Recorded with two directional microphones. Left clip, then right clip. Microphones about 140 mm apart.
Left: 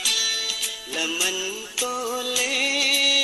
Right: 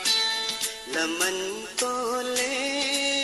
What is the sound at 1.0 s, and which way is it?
Music, 10° left (ahead or behind).